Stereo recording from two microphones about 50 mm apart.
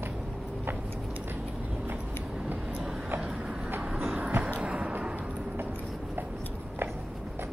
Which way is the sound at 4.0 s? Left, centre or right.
Right.